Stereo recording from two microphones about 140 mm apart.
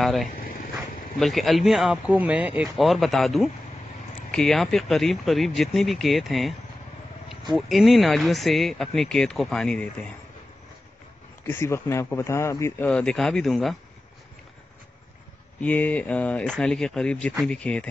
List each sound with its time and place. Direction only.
0.0 s speech: centre (ahead or behind)
0.4 s dog: 80° left
1.2 s speech: centre (ahead or behind)
7.5 s speech: centre (ahead or behind)
11.4 s speech: 20° left (ahead or behind); by 13.7 s centre (ahead or behind)
15.6 s speech: 10° left (ahead or behind)